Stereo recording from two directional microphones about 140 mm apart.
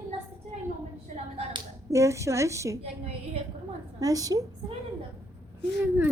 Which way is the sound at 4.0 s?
25° right (ahead or behind).